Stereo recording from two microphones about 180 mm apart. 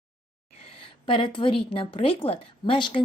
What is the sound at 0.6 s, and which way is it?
A woman's voice, 30° left (ahead or behind).